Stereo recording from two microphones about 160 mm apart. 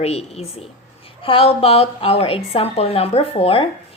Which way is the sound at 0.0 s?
40° left (ahead or behind).